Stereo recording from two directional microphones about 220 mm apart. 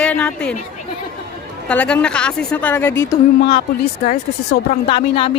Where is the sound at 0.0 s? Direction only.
5° left (ahead or behind).